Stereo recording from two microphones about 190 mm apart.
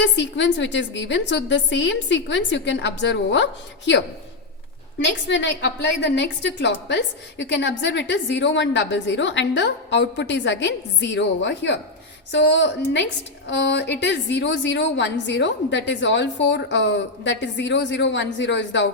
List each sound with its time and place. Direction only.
0.0 s a woman's voice: 70° left (ahead or behind)
4.9 s a woman's voice: 70° left (ahead or behind)